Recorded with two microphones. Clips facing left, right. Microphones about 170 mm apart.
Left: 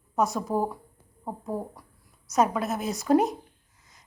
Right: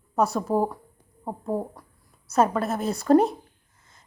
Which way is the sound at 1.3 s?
20° right (ahead or behind).